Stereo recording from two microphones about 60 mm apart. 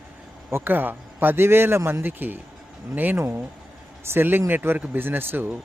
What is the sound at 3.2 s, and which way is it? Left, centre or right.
A man's voice, right.